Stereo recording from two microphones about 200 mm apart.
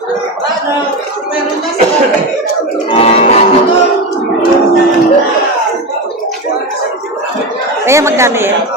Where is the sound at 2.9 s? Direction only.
30° left (ahead or behind).